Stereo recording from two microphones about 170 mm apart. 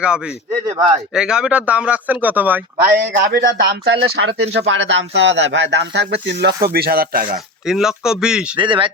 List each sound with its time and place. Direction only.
1.1 s speech: 5° right (ahead or behind)
3.2 s speech: 80° right
6.7 s speech: 65° right (ahead or behind)
7.7 s speech: 5° right (ahead or behind)
8.5 s speech: 30° right (ahead or behind)